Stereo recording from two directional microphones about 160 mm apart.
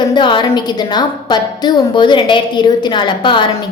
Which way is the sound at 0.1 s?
30° left (ahead or behind).